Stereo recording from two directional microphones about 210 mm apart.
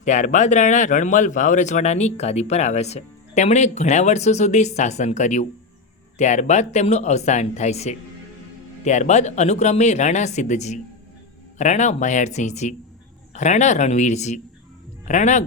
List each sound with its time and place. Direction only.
0.0 s speech: 35° left (ahead or behind)